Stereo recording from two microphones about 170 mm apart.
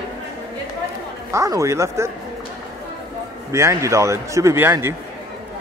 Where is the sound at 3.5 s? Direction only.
15° right (ahead or behind).